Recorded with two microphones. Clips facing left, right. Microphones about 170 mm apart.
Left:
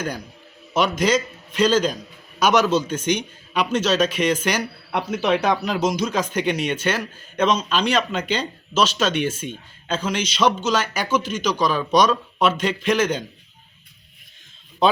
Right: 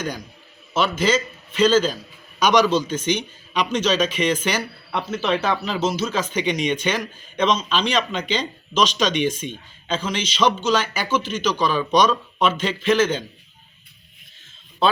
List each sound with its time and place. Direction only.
0.0 s a man's voice: 10° left (ahead or behind)
14.8 s speech: 15° left (ahead or behind)